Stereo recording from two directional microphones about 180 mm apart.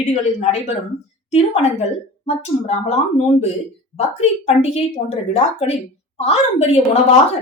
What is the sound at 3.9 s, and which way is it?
A woman's voice, 40° left (ahead or behind).